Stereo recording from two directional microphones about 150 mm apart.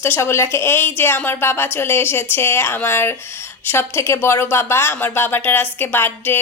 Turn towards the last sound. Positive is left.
turn(degrees=15)  # may be behind; listen again after turning